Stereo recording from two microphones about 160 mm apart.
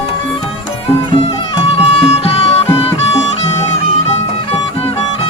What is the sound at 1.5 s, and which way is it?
Music, 35° left (ahead or behind).